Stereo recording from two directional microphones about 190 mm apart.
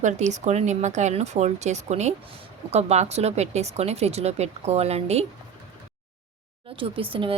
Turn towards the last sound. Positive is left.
turn(degrees=-30)  # may be behind; listen again after turning